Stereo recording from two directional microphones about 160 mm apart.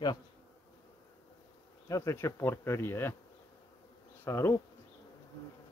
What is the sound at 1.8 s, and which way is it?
Bee, 20° left (ahead or behind).